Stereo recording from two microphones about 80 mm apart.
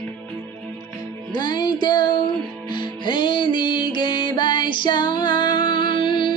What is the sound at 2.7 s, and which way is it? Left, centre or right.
Music, left.